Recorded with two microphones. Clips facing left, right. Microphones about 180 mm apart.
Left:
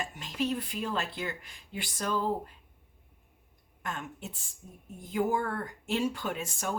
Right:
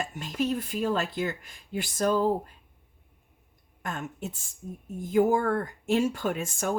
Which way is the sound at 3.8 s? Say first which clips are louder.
Right 4 dB; 45° right (ahead or behind).